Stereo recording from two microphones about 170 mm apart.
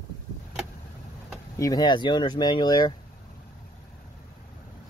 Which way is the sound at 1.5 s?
20° left (ahead or behind).